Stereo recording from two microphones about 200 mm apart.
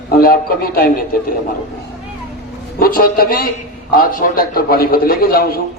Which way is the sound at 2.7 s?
45° left (ahead or behind).